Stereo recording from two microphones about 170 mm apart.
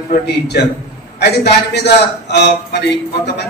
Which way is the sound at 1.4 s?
75° left (ahead or behind).